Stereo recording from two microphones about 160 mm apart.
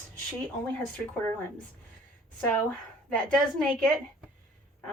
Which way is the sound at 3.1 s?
5° left (ahead or behind).